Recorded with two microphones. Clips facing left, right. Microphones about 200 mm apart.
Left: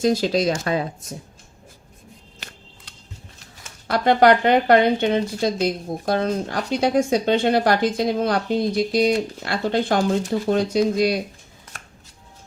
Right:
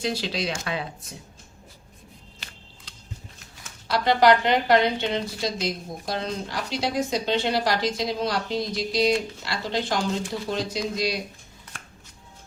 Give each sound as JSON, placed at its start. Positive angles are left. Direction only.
{"t": 0.0, "sound": "speech", "side_deg": 45}
{"t": 3.8, "sound": "speech", "side_deg": 55}